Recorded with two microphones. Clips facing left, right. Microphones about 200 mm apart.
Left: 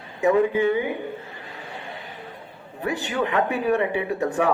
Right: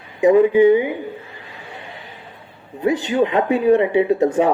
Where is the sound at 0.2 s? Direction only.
15° right (ahead or behind).